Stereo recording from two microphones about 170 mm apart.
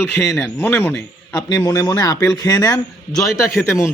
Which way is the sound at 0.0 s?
15° left (ahead or behind).